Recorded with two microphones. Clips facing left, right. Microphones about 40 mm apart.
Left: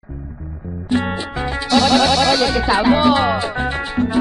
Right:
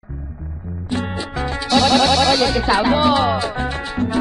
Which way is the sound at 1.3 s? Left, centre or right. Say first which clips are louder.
Left 1 dB; centre.